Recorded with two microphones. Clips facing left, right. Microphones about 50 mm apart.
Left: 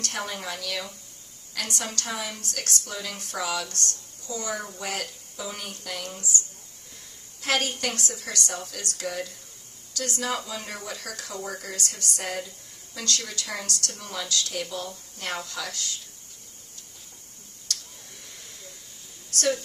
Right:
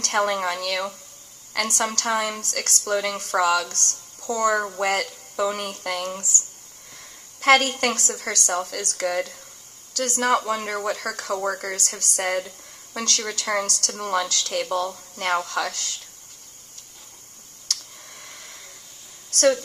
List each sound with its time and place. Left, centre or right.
0.0 s a woman's voice: right
11.7 s a woman's voice: right
17.6 s a sound: right
19.3 s a woman's voice: right